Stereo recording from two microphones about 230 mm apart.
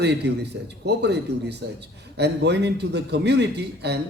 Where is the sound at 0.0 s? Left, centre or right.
Right.